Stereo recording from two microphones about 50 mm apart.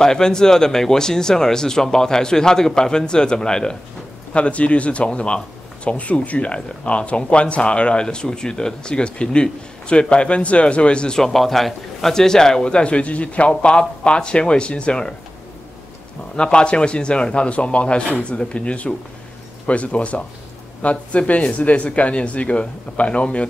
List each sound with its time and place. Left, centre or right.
0.0 s speech: centre
11.2 s speech: centre
16.3 s speech: centre